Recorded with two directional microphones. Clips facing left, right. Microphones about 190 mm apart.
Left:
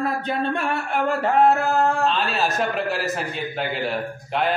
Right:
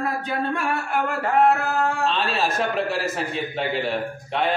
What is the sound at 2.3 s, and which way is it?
A man's voice, centre (ahead or behind).